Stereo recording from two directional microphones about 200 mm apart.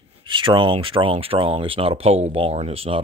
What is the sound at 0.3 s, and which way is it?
Speech, 25° right (ahead or behind).